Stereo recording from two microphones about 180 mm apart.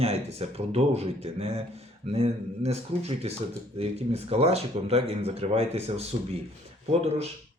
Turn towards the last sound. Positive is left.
turn(degrees=-35)  # may be behind; listen again after turning